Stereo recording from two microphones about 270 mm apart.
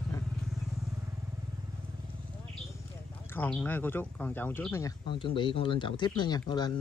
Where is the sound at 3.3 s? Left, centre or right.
Centre.